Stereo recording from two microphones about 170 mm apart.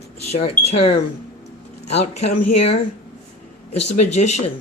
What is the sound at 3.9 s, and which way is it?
Speech, 40° left (ahead or behind).